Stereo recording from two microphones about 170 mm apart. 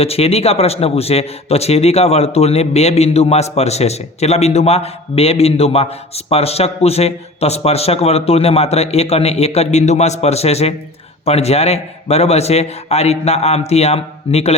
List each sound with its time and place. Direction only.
0.0 s a man's voice: 35° left (ahead or behind)